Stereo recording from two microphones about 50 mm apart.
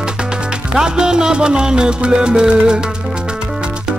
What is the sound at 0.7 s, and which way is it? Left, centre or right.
Music, centre.